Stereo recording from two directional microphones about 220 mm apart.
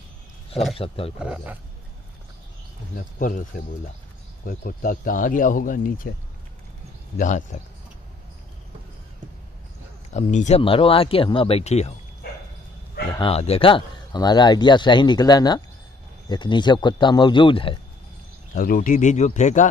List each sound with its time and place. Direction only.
0.7 s speech: 25° left (ahead or behind)
1.2 s speech: 5° right (ahead or behind)
3.2 s speech: 40° left (ahead or behind)
7.2 s speech: 35° left (ahead or behind)
10.1 s speech: 30° left (ahead or behind)
13.2 s speech: 25° left (ahead or behind)
18.5 s speech: 40° left (ahead or behind)